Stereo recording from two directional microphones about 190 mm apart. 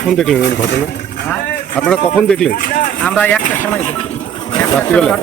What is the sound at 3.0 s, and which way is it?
Speech, 5° left (ahead or behind).